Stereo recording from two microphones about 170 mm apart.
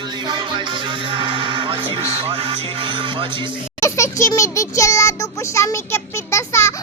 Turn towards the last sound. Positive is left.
turn(degrees=15)  # may be behind; listen again after turning